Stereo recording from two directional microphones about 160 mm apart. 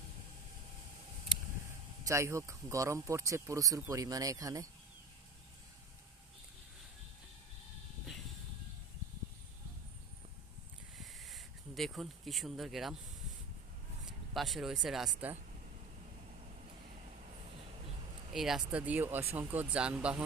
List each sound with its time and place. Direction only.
1.3 s vehicle: 5° right (ahead or behind)
2.0 s speech: 20° right (ahead or behind)
11.0 s a sound: centre (ahead or behind)
14.3 s speech: centre (ahead or behind)
18.3 s speech: centre (ahead or behind)